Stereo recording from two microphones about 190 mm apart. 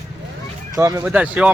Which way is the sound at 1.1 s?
5° right (ahead or behind).